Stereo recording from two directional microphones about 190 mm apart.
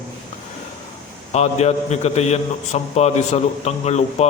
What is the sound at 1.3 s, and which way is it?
A man's voice, 35° left (ahead or behind).